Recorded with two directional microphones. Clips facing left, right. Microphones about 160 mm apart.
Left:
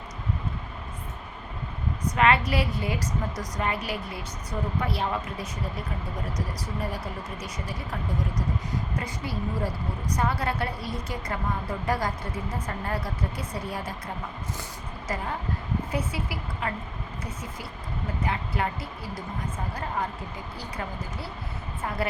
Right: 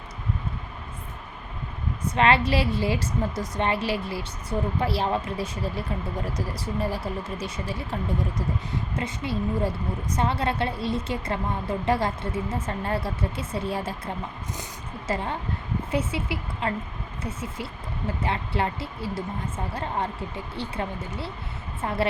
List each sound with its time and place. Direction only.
2.1 s a woman's voice: 30° right (ahead or behind)
15.0 s a woman's voice: 25° right (ahead or behind)
20.6 s a woman's voice: 25° right (ahead or behind)